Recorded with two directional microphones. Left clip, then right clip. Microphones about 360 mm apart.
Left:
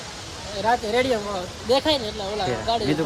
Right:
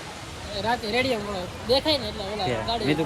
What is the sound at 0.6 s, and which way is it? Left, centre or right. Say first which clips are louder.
Speech: left 4 dB; centre.